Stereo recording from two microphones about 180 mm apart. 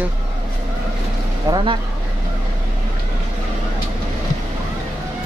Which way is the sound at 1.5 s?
25° right (ahead or behind).